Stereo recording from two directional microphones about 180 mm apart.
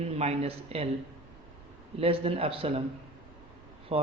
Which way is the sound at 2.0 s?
30° right (ahead or behind).